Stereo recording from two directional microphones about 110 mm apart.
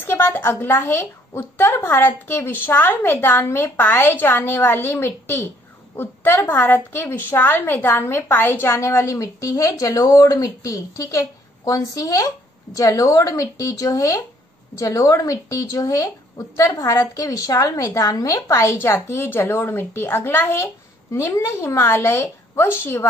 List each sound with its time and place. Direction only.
0.0 s a woman's voice: 20° left (ahead or behind)